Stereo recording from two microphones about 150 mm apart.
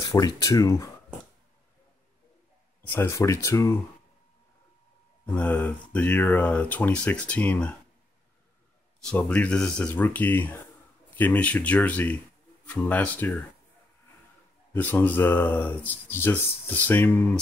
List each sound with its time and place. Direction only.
0.0 s speech: 25° left (ahead or behind)
2.9 s speech: 20° left (ahead or behind)
5.2 s speech: 10° left (ahead or behind)
9.0 s speech: 10° left (ahead or behind)
14.7 s speech: 10° left (ahead or behind)